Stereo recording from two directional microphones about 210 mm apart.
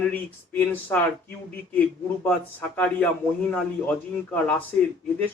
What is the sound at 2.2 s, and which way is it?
A man's voice, 10° left (ahead or behind).